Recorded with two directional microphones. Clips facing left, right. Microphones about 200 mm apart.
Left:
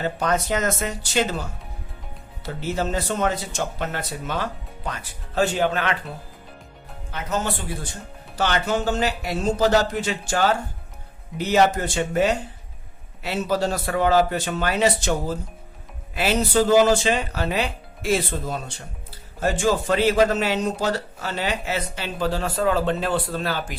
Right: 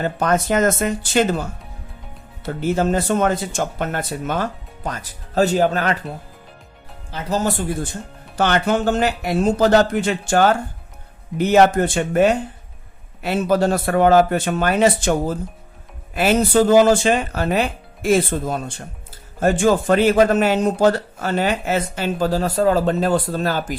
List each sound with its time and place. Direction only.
0.0 s speech: 50° right (ahead or behind)
2.6 s speech: 50° right (ahead or behind)
7.1 s speech: 30° right (ahead or behind)
8.4 s speech: 55° right (ahead or behind)
16.1 s speech: 50° right (ahead or behind)